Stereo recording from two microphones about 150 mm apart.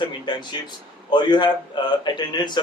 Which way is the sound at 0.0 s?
30° left (ahead or behind).